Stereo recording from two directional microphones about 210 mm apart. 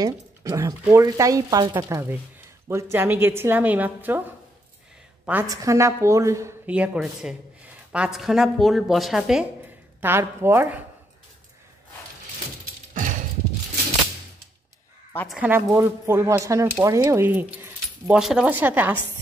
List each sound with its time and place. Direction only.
0.0 s speech: 15° right (ahead or behind)
5.2 s a woman's voice: 10° right (ahead or behind)
15.1 s speech: centre (ahead or behind)